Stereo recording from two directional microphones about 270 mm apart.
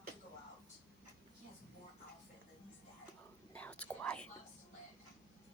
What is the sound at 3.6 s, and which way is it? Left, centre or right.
Whispering, centre.